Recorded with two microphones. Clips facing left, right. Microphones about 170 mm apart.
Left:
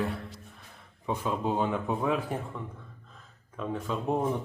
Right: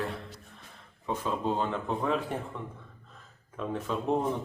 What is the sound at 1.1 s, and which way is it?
A man's voice, 10° left (ahead or behind).